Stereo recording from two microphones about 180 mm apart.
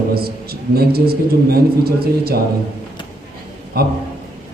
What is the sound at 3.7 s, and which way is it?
Speech, 60° right (ahead or behind).